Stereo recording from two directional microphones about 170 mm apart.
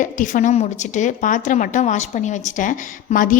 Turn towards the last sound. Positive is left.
turn(degrees=50)  # may be behind; listen again after turning